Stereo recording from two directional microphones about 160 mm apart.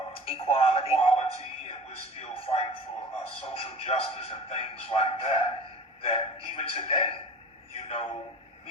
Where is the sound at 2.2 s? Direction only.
35° left (ahead or behind).